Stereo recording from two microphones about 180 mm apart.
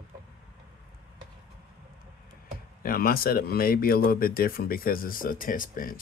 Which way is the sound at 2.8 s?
55° left (ahead or behind).